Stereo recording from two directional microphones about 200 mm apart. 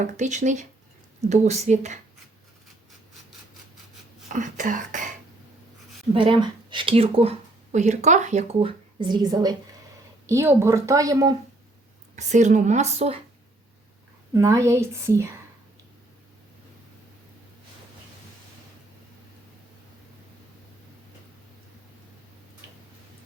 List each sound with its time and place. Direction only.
0.0 s a woman's voice: 35° right (ahead or behind)
4.3 s a woman's voice: 40° right (ahead or behind)
6.1 s speech: 25° right (ahead or behind)
12.1 s a woman's voice: 35° right (ahead or behind)
14.3 s speech: 15° right (ahead or behind)